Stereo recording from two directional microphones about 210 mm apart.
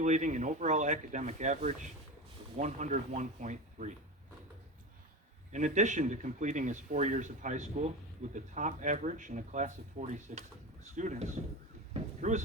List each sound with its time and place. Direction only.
0.0 s speech: 35° right (ahead or behind)
5.5 s speech: 35° right (ahead or behind)